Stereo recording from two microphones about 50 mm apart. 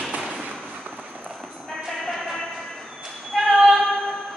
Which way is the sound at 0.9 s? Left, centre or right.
Centre.